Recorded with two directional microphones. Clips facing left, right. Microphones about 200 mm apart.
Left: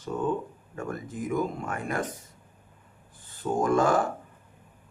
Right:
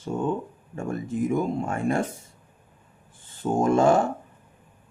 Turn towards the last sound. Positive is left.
turn(degrees=-25)  # may be behind; listen again after turning